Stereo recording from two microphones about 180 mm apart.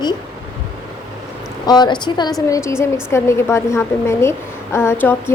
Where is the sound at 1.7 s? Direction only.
25° left (ahead or behind).